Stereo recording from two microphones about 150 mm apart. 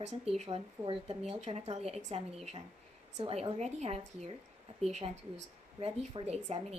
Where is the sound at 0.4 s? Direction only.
35° right (ahead or behind).